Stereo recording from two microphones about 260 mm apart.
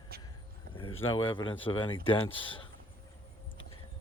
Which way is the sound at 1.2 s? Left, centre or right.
Centre.